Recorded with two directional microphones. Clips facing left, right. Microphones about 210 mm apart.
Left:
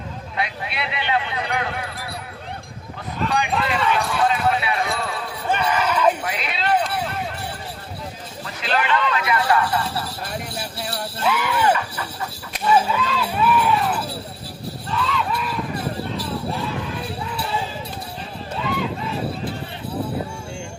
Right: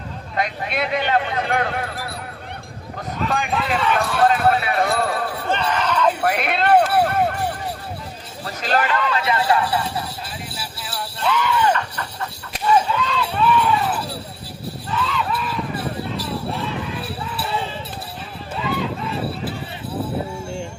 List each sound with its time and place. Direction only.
0.3 s speech: 45° right (ahead or behind)
3.2 s speech: 45° right (ahead or behind)
3.9 s a sound: 50° right (ahead or behind)
5.5 s a sound: 10° left (ahead or behind)
6.2 s run: 55° right (ahead or behind)
8.4 s hubbub: 40° right (ahead or behind)
9.2 s speech: 25° right (ahead or behind)
10.2 s jingle bell: 50° left (ahead or behind)
11.2 s speech: 5° left (ahead or behind)
14.8 s a sound: centre (ahead or behind)
16.1 s jingle bell: centre (ahead or behind)